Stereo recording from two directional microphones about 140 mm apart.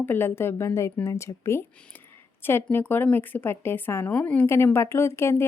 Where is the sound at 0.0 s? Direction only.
15° left (ahead or behind).